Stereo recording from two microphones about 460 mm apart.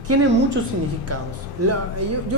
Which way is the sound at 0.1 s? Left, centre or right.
Right.